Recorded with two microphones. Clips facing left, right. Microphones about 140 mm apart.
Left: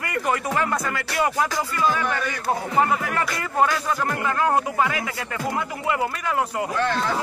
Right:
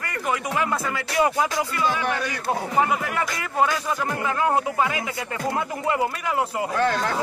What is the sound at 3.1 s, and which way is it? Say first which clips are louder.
Music: left 1 dB; 10° right (ahead or behind).